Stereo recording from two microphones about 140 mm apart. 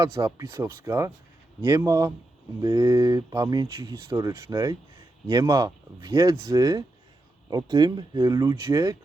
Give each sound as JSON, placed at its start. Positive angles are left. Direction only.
{"t": 0.0, "sound": "speech", "side_deg": -30}